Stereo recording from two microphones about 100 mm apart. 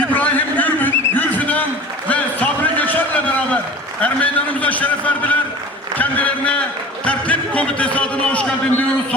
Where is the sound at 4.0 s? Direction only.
15° left (ahead or behind).